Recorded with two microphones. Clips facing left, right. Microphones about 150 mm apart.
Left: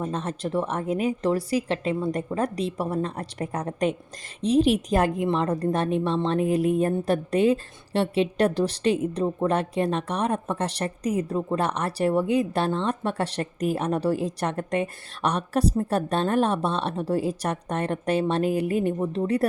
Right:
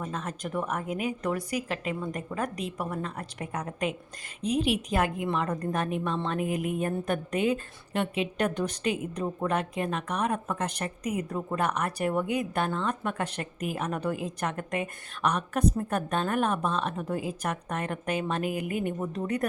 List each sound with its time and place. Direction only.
0.0 s speech: 30° left (ahead or behind)